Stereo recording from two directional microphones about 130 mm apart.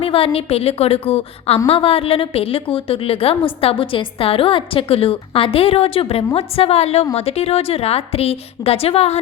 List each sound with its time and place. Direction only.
0.0 s a woman's voice: 45° left (ahead or behind)